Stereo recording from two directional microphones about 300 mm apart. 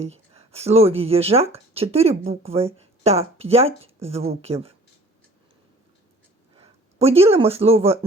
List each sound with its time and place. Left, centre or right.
0.0 s speech: right
6.6 s speech: centre